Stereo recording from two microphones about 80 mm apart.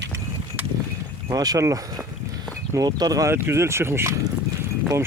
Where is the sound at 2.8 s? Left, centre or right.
Right.